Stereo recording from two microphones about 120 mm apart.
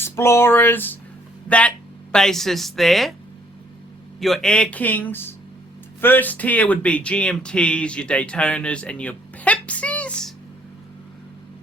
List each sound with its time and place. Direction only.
0.0 s speech: 20° left (ahead or behind); by 3.2 s centre (ahead or behind)
4.2 s a man's voice: 5° left (ahead or behind)